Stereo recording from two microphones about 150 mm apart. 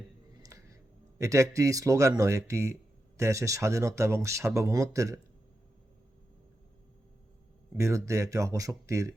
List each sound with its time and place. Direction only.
0.3 s music: 20° right (ahead or behind)
1.2 s speech: 20° right (ahead or behind)
7.8 s speech: 20° right (ahead or behind)